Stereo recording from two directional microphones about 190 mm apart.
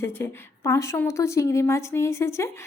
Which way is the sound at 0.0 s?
15° left (ahead or behind).